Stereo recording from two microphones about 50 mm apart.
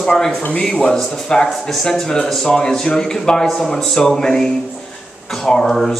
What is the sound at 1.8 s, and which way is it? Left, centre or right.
A man's voice, centre.